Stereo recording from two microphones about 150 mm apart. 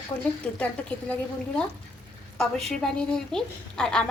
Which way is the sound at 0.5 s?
10° left (ahead or behind).